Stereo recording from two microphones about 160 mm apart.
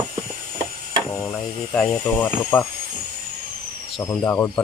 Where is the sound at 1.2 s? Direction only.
10° left (ahead or behind).